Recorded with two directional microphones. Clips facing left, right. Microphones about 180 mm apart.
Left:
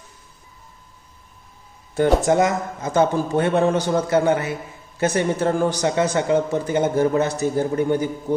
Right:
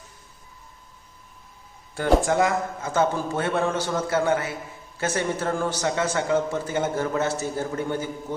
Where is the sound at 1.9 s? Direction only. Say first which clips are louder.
Left 4 dB; 20° left (ahead or behind).